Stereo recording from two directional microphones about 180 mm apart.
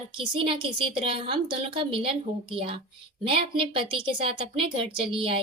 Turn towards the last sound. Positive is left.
turn(degrees=-30)  # may be behind; listen again after turning